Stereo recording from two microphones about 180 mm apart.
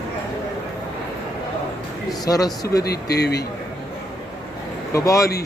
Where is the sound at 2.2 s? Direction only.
20° left (ahead or behind).